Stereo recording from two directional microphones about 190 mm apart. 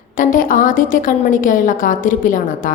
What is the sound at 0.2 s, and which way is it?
A woman's voice, 45° left (ahead or behind).